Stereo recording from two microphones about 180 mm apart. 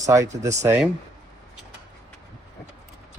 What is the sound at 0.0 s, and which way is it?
Speech, 15° right (ahead or behind).